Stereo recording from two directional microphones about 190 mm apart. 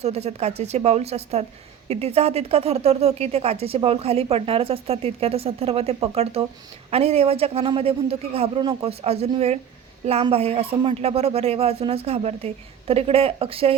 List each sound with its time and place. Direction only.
0.0 s speech: 35° right (ahead or behind)